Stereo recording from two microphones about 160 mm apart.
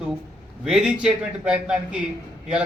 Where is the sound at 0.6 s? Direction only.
5° right (ahead or behind).